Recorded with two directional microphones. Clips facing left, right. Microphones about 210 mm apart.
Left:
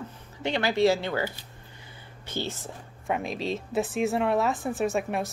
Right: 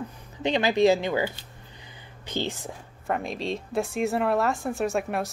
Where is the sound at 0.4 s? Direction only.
20° right (ahead or behind).